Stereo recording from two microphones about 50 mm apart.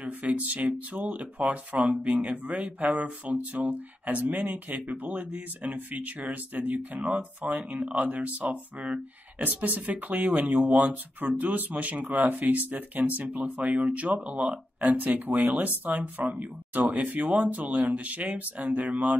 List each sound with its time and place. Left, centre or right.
0.0 s speech: right
7.0 s speech: right